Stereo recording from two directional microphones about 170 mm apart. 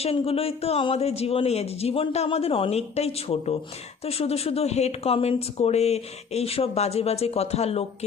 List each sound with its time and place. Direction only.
0.0 s speech: 35° left (ahead or behind)